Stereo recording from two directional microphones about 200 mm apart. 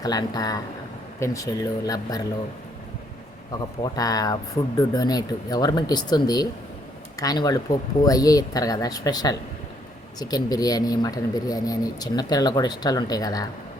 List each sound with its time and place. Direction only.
0.0 s speech: 20° left (ahead or behind)
3.9 s speech: 20° left (ahead or behind)